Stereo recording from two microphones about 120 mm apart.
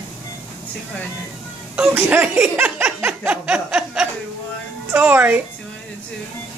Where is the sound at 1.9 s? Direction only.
20° right (ahead or behind).